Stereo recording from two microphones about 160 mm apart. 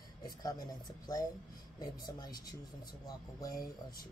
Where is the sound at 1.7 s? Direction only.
25° left (ahead or behind).